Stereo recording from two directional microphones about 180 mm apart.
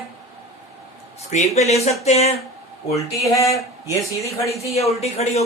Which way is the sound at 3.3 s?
15° left (ahead or behind).